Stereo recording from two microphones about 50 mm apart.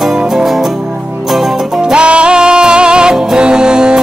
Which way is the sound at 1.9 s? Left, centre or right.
Right.